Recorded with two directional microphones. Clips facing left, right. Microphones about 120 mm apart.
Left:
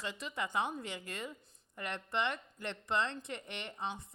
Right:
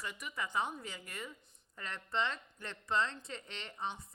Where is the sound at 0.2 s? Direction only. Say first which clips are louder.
Left 1 dB; 25° left (ahead or behind).